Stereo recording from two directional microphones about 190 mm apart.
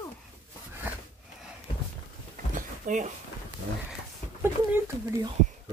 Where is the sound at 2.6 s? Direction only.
40° right (ahead or behind).